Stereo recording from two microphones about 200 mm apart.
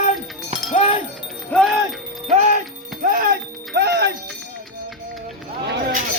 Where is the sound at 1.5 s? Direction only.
Centre (ahead or behind).